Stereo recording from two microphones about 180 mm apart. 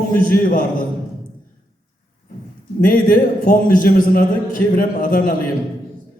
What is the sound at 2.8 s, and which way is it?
A man's voice, 50° left (ahead or behind).